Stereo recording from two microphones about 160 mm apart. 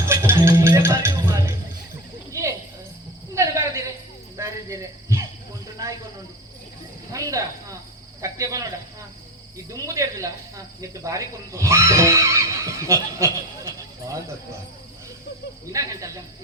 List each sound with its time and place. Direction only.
0.1 s music: 15° right (ahead or behind)
2.3 s cricket: 20° right (ahead or behind)
5.8 s a sound: 20° right (ahead or behind)
7.1 s cricket: 20° right (ahead or behind)
9.6 s cricket: 20° right (ahead or behind)
10.8 s music: 20° right (ahead or behind)
15.7 s cricket: 20° right (ahead or behind)